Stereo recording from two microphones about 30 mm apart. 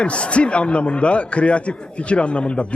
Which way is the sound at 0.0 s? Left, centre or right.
Left.